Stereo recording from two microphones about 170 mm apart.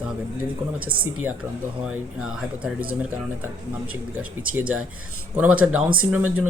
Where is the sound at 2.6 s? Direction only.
10° right (ahead or behind).